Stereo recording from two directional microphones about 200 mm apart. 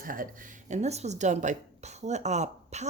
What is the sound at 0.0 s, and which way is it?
Speech, 45° right (ahead or behind).